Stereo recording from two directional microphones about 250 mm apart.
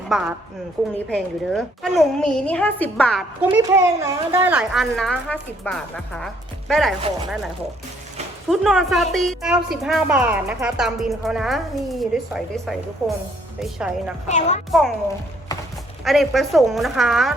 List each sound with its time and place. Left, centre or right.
0.1 s a woman's voice: centre
8.4 s a woman's voice: centre
14.3 s a child's voice: left
14.7 s a woman's voice: centre
16.0 s a woman's voice: centre